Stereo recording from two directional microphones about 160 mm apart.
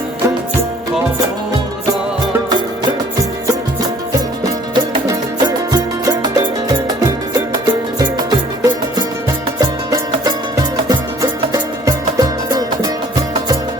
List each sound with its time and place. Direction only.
1.9 s music: 25° right (ahead or behind)
4.7 s music: 25° right (ahead or behind)